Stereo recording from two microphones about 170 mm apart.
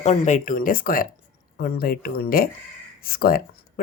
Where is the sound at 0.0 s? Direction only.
45° left (ahead or behind).